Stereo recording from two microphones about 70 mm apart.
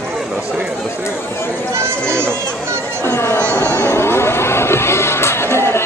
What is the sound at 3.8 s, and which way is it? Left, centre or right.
Music, left.